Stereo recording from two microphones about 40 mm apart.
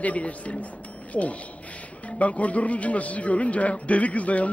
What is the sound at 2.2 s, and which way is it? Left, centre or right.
A man's voice, left.